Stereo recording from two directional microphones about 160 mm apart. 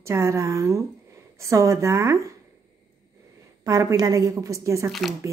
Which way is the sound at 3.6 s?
20° right (ahead or behind).